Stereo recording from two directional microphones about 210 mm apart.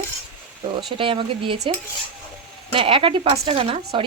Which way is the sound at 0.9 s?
25° right (ahead or behind).